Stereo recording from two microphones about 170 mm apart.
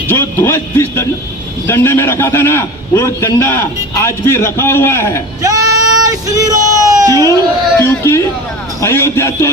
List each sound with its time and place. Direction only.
0.1 s a man's voice: 15° left (ahead or behind)
5.4 s a sound: 20° right (ahead or behind)
7.8 s a man's voice: 15° left (ahead or behind)